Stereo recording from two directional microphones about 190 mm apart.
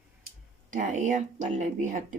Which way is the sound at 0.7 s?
40° right (ahead or behind).